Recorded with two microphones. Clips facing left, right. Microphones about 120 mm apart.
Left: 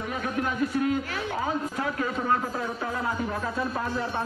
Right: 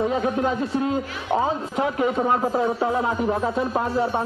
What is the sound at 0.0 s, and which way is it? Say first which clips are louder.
Speech: right 8 dB; 25° right (ahead or behind).